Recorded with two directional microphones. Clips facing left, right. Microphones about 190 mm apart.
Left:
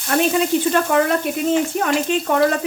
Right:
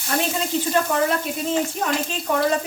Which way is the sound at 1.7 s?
60° left (ahead or behind).